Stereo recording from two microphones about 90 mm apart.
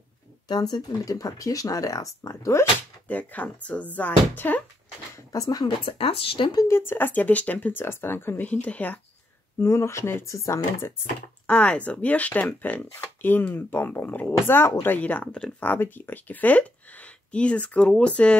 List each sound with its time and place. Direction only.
0.5 s speech: 50° left (ahead or behind)
3.1 s speech: 15° left (ahead or behind)
5.3 s speech: 40° left (ahead or behind)
5.9 s speech: 90° left
6.7 s speech: 25° left (ahead or behind)
9.6 s speech: 30° left (ahead or behind)
11.4 s speech: 15° left (ahead or behind)